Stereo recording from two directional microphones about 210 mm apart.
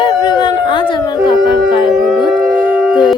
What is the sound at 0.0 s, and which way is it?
Howl, 20° left (ahead or behind).